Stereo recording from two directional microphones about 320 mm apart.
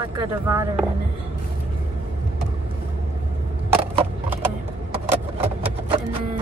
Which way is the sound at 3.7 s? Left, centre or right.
Centre.